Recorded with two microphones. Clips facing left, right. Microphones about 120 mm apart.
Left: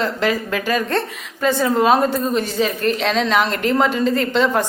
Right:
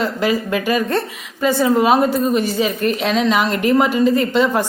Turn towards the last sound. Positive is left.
turn(degrees=-5)  # may be behind; listen again after turning